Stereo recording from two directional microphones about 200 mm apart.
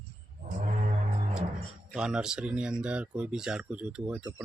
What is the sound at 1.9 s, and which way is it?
Speech, 5° right (ahead or behind).